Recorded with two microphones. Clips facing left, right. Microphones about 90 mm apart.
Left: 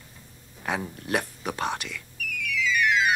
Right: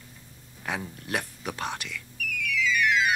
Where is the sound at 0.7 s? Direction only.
25° left (ahead or behind).